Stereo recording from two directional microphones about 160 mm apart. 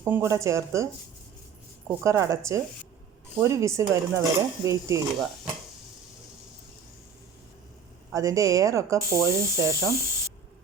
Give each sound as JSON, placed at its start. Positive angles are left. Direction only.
{"t": 0.0, "sound": "speech", "side_deg": -15}
{"t": 2.0, "sound": "speech", "side_deg": -20}
{"t": 8.1, "sound": "speech", "side_deg": -20}